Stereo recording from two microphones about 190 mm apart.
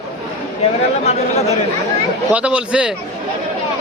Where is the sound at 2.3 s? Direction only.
5° right (ahead or behind).